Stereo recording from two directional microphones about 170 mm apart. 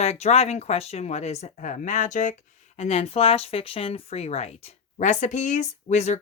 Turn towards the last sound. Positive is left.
turn(degrees=45)  # may be behind; listen again after turning